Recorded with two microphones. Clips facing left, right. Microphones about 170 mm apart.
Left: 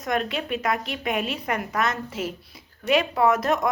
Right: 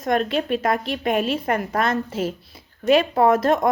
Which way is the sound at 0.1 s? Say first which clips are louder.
Right 5 dB; 30° right (ahead or behind).